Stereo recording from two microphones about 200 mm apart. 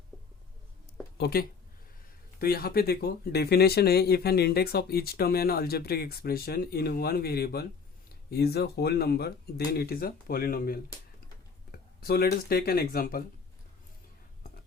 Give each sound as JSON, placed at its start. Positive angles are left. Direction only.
{"t": 1.2, "sound": "speech", "side_deg": 50}